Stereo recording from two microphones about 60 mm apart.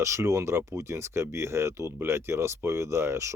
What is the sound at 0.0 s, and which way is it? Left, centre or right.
Speech, right.